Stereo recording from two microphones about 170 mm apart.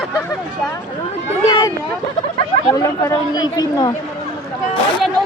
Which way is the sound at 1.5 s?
25° left (ahead or behind).